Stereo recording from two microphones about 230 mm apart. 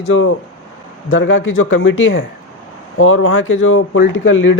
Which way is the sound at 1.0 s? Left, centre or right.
Left.